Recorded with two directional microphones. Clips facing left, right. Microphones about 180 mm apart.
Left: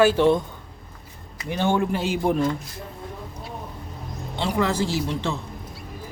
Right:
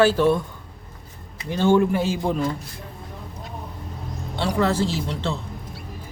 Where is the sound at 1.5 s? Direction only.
15° left (ahead or behind).